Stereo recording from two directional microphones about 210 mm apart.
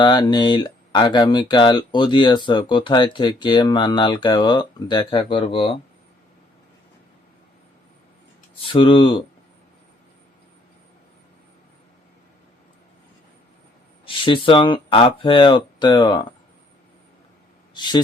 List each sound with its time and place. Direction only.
0.0 s speech: 20° left (ahead or behind)
8.6 s speech: 25° left (ahead or behind)
14.0 s speech: 25° left (ahead or behind)
17.7 s speech: 20° left (ahead or behind)